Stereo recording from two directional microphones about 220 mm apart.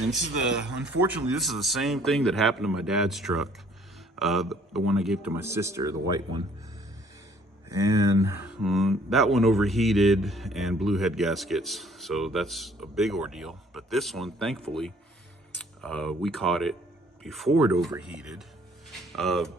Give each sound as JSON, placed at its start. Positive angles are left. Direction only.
{"t": 0.1, "sound": "a man's voice", "side_deg": 0}
{"t": 8.3, "sound": "speech", "side_deg": 50}
{"t": 8.5, "sound": "speech", "side_deg": 0}